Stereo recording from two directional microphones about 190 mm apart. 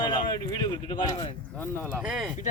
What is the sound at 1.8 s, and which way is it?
Speech, 5° right (ahead or behind).